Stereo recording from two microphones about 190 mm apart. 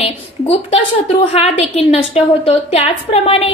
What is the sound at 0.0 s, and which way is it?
A woman's voice, 30° left (ahead or behind).